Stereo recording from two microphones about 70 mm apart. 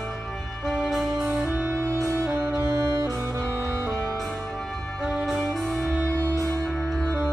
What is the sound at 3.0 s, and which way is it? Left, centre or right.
Music, centre.